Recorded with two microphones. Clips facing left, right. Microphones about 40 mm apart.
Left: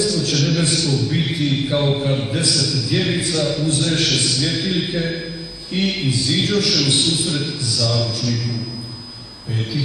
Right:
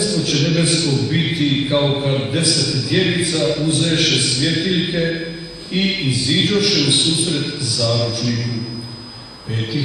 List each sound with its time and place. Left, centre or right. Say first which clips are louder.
0.0 s a man's voice: right 1 dB; centre